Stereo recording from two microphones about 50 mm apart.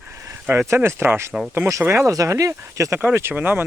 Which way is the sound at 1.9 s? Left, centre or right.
Right.